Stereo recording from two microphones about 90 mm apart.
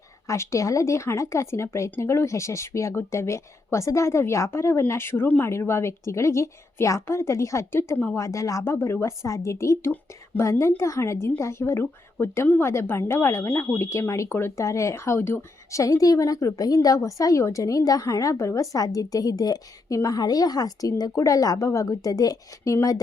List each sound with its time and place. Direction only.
0.3 s speech: 35° left (ahead or behind)
8.2 s speech: 35° left (ahead or behind)